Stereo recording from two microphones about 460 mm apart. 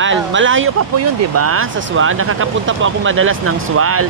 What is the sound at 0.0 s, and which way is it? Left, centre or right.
Speech, right.